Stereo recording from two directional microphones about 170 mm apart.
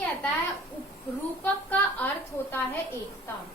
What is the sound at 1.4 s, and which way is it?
Speech, 10° left (ahead or behind).